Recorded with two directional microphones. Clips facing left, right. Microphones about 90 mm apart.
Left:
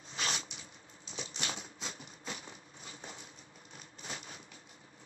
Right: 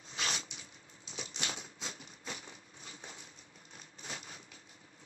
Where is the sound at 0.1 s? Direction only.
25° left (ahead or behind).